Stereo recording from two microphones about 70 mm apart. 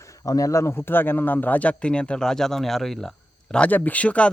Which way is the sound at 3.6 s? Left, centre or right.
Left.